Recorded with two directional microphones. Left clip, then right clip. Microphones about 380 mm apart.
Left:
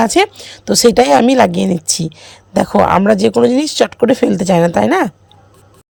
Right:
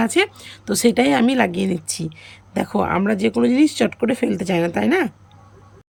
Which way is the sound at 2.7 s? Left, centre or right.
Left.